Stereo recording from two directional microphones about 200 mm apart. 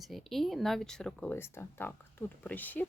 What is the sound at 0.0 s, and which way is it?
Speech, centre (ahead or behind).